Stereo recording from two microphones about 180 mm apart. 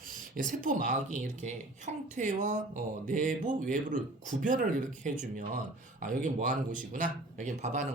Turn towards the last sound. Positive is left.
turn(degrees=-40)  # may be behind; listen again after turning